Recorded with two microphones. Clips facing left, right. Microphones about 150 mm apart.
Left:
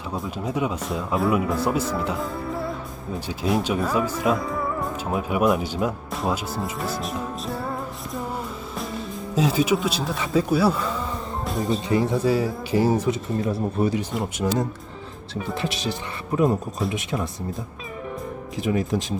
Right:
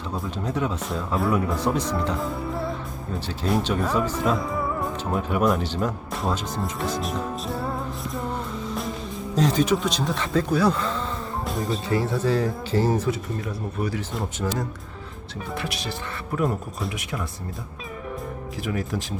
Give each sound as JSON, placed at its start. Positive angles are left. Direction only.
{"t": 0.1, "sound": "speech", "side_deg": 10}
{"t": 9.3, "sound": "speech", "side_deg": 5}
{"t": 11.9, "sound": "speech", "side_deg": 15}
{"t": 13.4, "sound": "speech", "side_deg": 30}
{"t": 14.3, "sound": "speech", "side_deg": 15}
{"t": 18.5, "sound": "speech", "side_deg": 20}